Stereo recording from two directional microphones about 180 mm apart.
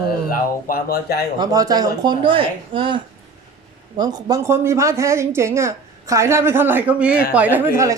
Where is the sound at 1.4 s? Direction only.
20° right (ahead or behind).